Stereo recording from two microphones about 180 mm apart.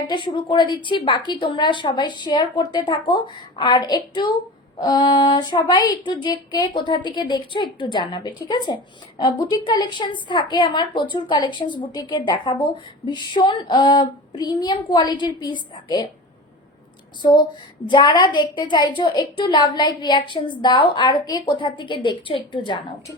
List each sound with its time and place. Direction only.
0.1 s child singing: 25° left (ahead or behind)
17.2 s child singing: 25° left (ahead or behind)